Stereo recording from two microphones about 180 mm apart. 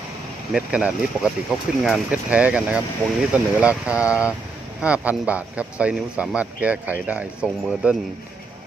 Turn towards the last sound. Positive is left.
turn(degrees=0)  # may be behind; listen again after turning